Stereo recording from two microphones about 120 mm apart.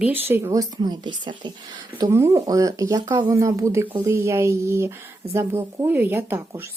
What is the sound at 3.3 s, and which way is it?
A woman's voice, 25° right (ahead or behind).